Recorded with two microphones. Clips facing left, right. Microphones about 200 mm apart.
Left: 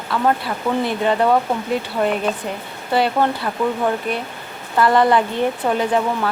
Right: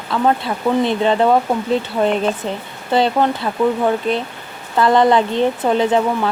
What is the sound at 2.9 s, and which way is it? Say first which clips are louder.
Speech: right 2 dB; 20° right (ahead or behind).